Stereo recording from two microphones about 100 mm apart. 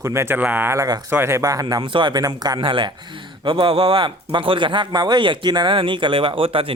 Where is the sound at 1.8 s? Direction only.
55° right (ahead or behind).